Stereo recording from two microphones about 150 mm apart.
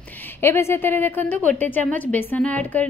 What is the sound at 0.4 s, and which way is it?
A woman's voice, 15° left (ahead or behind).